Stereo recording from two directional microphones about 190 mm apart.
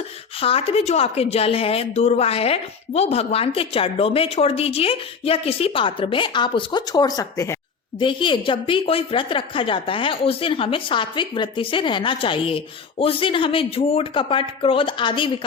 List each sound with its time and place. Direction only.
0.3 s a woman's voice: 30° left (ahead or behind)